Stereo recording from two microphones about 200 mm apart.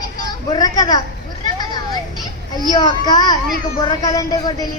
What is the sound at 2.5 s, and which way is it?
A woman's voice, 20° left (ahead or behind).